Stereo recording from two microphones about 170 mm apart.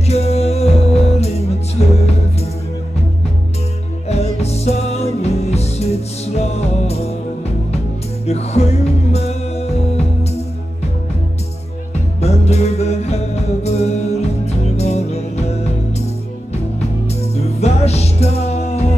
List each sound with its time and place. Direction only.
0.0 s music: 40° left (ahead or behind)
4.1 s music: 40° left (ahead or behind)
8.3 s music: 40° left (ahead or behind)
12.2 s music: 40° left (ahead or behind)
17.1 s music: 40° left (ahead or behind)